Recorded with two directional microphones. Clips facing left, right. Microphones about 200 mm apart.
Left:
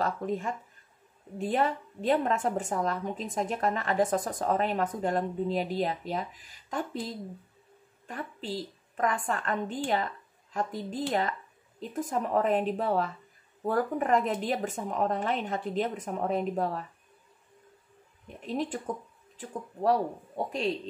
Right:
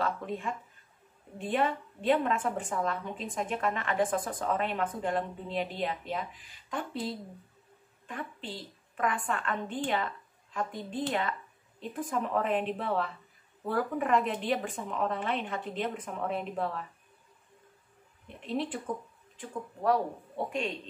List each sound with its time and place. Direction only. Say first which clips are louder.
0.0 s a woman's voice: left 3 dB; 40° left (ahead or behind)
8.1 s a woman's voice: left 4 dB; 40° left (ahead or behind)
18.5 s speech: left 1 dB; 45° left (ahead or behind)
19.3 s speech: left 1 dB; 30° left (ahead or behind)